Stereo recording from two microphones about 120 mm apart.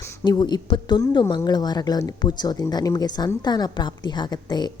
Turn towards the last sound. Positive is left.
turn(degrees=35)  # may be behind; listen again after turning